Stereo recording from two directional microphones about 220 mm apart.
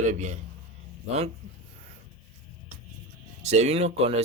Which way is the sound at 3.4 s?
30° right (ahead or behind).